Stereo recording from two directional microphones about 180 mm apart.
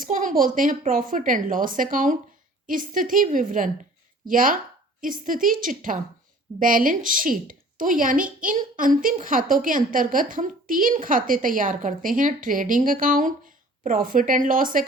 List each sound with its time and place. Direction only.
0.0 s a woman's voice: 45° right (ahead or behind)